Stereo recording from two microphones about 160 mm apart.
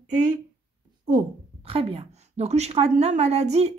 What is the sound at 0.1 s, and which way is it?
Speech, 50° right (ahead or behind).